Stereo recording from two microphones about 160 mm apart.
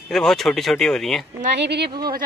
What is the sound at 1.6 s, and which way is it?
Speech, 90° right.